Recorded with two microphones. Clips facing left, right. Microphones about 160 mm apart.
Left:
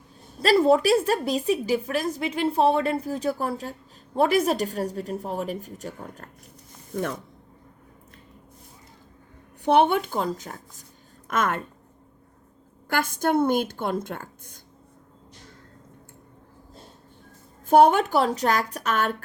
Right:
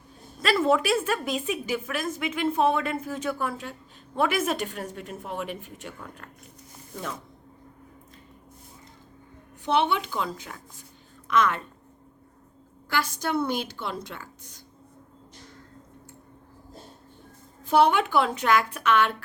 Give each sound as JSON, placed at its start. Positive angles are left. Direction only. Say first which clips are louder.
{"t": 0.3, "sound": "a woman's voice", "louder": "left 4 dB", "side_deg": 35}
{"t": 9.6, "sound": "a woman's voice", "louder": "left 5 dB", "side_deg": 50}
{"t": 12.9, "sound": "a woman's voice", "louder": "left 4 dB", "side_deg": 50}
{"t": 17.7, "sound": "a woman's voice", "louder": "left 4 dB", "side_deg": 45}